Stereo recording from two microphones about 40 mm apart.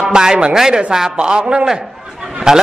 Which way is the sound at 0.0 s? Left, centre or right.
Centre.